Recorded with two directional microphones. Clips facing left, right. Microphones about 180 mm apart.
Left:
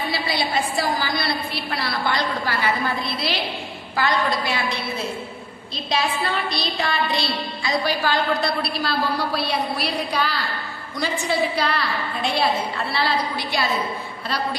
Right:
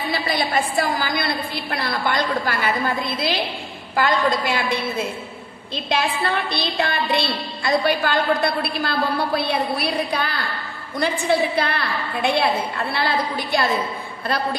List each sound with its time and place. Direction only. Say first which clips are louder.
0.1 s a woman's voice: right 4 dB; 50° right (ahead or behind)